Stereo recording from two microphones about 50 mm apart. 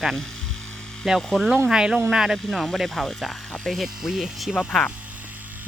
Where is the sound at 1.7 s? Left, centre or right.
Centre.